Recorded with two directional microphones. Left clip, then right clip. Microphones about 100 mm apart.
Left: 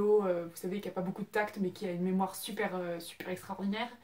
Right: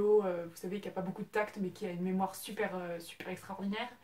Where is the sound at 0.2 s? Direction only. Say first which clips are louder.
Left 3 dB; 15° right (ahead or behind).